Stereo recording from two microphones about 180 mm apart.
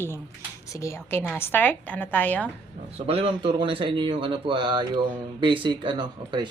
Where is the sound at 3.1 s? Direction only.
30° right (ahead or behind).